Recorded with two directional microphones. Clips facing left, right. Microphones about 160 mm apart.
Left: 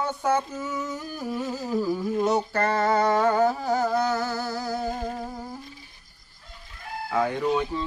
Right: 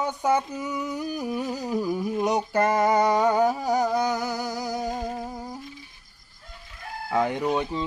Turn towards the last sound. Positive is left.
turn(degrees=-20)  # may be behind; listen again after turning